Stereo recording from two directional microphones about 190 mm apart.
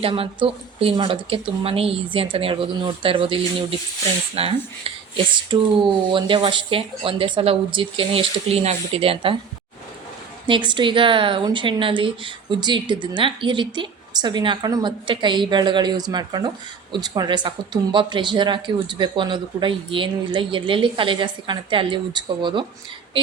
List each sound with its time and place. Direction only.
0.0 s speech: 30° right (ahead or behind)
10.4 s speech: 25° right (ahead or behind)